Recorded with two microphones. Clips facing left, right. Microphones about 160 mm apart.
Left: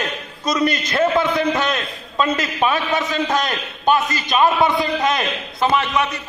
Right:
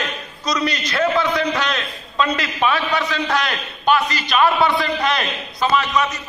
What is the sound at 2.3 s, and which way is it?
Speech, 45° left (ahead or behind).